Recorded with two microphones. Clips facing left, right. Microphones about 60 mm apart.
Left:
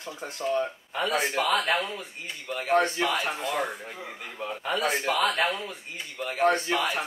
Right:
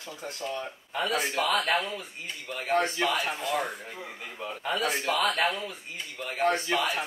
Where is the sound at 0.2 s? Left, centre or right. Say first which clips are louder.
Left 7 dB; left.